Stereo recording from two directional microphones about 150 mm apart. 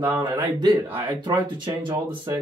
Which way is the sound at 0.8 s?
15° right (ahead or behind).